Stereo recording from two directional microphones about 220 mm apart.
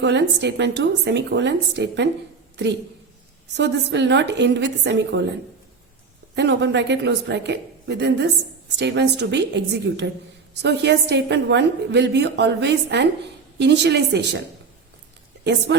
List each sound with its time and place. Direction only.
0.0 s a woman's voice: 50° right (ahead or behind)
6.3 s a woman's voice: 50° right (ahead or behind)